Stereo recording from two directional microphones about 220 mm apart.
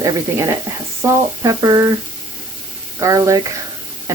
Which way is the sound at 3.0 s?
15° right (ahead or behind).